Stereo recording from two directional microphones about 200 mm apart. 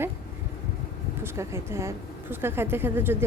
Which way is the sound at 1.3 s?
15° right (ahead or behind).